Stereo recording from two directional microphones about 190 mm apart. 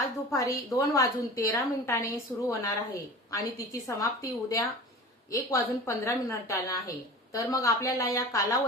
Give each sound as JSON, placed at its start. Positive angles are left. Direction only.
{"t": 0.3, "sound": "a woman's voice", "side_deg": 15}